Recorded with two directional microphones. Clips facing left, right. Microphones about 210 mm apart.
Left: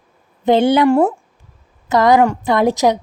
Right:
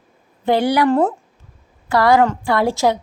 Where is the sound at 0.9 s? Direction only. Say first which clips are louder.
Left 3 dB; 10° left (ahead or behind).